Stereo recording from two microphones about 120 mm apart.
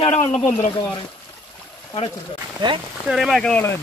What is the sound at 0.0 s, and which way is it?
Speech, 50° left (ahead or behind).